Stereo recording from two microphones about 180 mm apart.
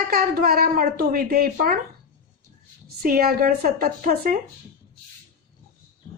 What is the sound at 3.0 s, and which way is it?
A woman's voice, 55° right (ahead or behind).